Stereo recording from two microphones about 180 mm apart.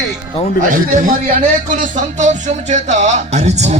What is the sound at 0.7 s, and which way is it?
Speech, 45° right (ahead or behind).